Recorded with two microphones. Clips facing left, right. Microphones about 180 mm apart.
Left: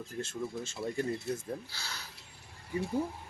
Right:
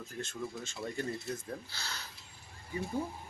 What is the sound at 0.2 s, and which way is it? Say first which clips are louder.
Speech: left 3 dB; 5° left (ahead or behind).